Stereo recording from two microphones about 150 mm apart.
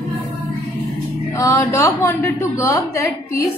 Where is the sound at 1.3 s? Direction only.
20° left (ahead or behind).